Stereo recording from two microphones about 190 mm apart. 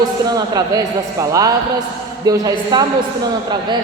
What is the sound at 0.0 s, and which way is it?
A woman's voice, 20° right (ahead or behind).